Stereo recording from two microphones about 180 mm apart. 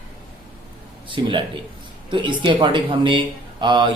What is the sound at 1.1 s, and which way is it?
Speech, 25° right (ahead or behind).